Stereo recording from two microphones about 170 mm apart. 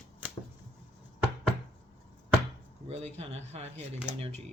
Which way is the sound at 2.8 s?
40° right (ahead or behind).